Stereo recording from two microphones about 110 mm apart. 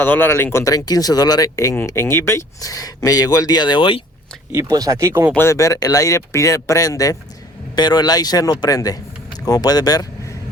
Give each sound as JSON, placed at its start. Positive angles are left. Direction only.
{"t": 0.0, "sound": "speech", "side_deg": 20}
{"t": 4.5, "sound": "speech", "side_deg": -30}
{"t": 5.4, "sound": "speech", "side_deg": 25}